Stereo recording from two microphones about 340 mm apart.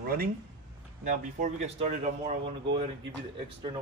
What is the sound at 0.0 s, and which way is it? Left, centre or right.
Speech, right.